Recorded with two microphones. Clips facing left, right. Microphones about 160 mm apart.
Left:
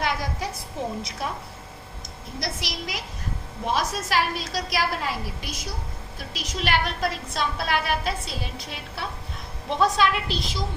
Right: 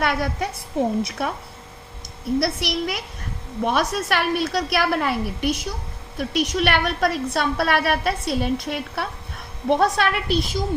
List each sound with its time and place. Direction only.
0.0 s a woman's voice: 60° right (ahead or behind)
2.4 s a woman's voice: 60° right (ahead or behind)